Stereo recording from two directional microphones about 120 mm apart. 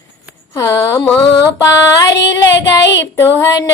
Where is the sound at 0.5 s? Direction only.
25° left (ahead or behind).